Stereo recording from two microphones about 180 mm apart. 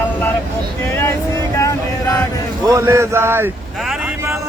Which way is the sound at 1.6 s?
20° left (ahead or behind).